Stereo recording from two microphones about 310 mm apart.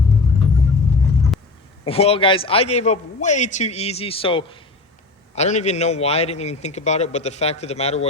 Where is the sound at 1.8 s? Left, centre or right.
Centre.